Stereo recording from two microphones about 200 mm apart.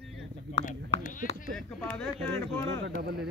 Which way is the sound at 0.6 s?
40° left (ahead or behind).